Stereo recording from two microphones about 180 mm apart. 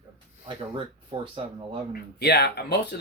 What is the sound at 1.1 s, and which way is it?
Speech, 25° right (ahead or behind).